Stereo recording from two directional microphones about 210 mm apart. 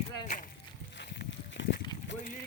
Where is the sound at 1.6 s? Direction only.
55° left (ahead or behind).